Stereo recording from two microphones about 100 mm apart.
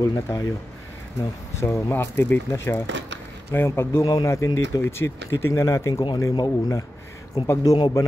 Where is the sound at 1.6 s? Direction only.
25° left (ahead or behind).